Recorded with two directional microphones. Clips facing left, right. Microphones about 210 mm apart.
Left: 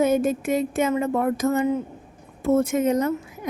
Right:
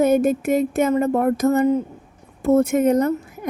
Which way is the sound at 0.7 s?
40° right (ahead or behind).